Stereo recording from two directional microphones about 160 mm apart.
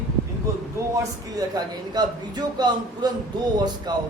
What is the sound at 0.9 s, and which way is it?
A man's voice, 25° right (ahead or behind).